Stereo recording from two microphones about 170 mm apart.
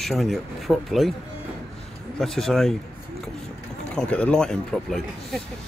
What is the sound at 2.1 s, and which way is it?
Speech, centre (ahead or behind).